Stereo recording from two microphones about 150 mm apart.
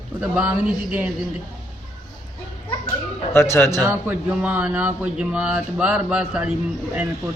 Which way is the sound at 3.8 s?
10° right (ahead or behind).